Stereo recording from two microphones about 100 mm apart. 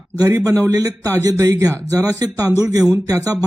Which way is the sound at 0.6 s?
35° right (ahead or behind).